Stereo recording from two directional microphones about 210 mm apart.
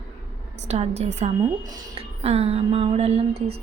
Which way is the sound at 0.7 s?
30° right (ahead or behind).